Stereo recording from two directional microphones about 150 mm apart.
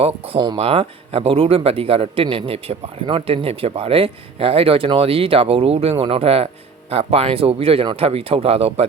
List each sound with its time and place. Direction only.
0.3 s speech: 30° right (ahead or behind)